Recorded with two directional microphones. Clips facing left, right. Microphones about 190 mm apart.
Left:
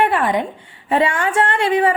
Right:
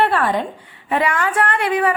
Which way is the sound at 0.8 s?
30° left (ahead or behind).